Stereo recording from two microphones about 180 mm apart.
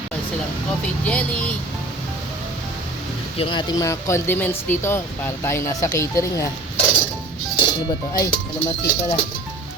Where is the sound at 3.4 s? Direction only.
25° left (ahead or behind).